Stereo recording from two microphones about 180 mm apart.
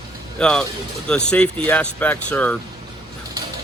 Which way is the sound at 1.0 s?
5° left (ahead or behind).